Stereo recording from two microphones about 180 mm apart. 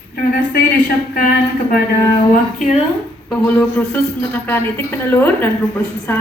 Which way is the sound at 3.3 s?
10° left (ahead or behind).